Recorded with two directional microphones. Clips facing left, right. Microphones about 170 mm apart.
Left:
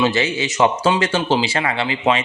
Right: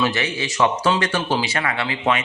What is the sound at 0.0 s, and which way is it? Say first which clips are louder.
A man's voice: left 4 dB; 25° left (ahead or behind).